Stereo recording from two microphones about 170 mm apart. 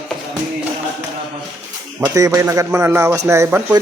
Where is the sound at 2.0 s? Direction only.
15° right (ahead or behind).